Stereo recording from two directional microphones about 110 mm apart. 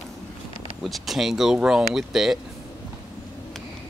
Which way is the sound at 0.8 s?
Centre (ahead or behind).